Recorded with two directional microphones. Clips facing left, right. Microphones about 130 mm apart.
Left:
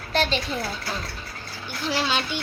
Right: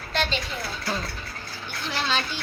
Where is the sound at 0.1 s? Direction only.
35° left (ahead or behind).